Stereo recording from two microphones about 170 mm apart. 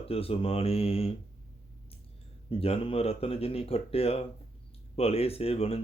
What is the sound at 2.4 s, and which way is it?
Speech, 35° left (ahead or behind).